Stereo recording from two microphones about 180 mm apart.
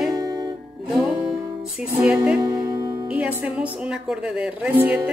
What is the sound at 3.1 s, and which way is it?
A woman's voice, 5° right (ahead or behind).